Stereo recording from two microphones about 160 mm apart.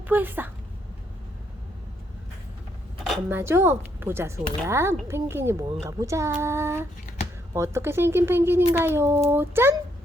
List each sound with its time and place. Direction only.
0.1 s speech: 10° right (ahead or behind)
3.2 s speech: 15° right (ahead or behind)